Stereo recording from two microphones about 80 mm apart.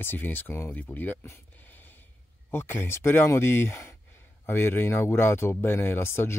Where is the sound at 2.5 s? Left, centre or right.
Left.